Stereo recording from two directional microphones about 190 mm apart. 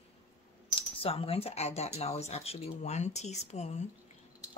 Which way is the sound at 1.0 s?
30° left (ahead or behind).